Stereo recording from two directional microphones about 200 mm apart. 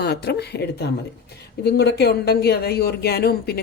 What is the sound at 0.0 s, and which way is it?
Speech, 55° left (ahead or behind).